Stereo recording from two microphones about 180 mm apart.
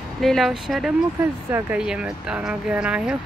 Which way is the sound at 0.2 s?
Centre (ahead or behind).